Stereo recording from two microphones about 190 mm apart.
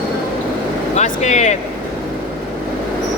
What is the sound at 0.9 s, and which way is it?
Speech, 40° left (ahead or behind).